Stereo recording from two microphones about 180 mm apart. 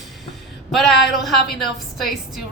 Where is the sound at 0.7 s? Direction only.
Centre (ahead or behind).